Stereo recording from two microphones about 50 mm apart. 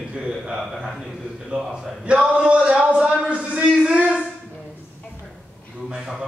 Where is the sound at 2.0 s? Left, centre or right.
Right.